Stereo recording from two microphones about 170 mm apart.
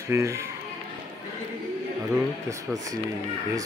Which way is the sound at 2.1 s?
20° right (ahead or behind).